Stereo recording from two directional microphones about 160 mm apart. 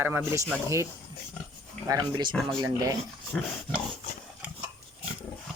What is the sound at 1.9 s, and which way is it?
Speech, 25° right (ahead or behind).